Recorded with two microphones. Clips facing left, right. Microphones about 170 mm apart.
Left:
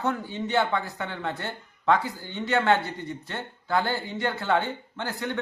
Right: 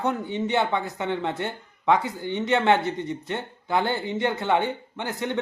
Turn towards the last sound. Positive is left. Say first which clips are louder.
# right 2 dB
turn(degrees=-20)  # may be behind; listen again after turning